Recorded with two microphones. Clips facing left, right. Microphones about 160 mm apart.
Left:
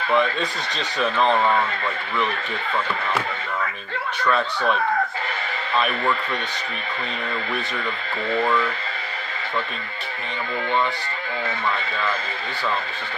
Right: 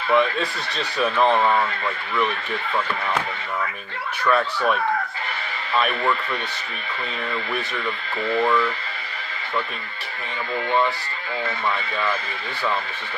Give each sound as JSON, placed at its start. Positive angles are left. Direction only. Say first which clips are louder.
{"t": 0.1, "sound": "speech", "louder": "right 2 dB", "side_deg": -5}
{"t": 4.3, "sound": "speech", "louder": "right 1 dB", "side_deg": -10}